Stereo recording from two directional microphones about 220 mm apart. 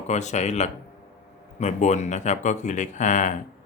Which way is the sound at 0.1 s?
30° left (ahead or behind).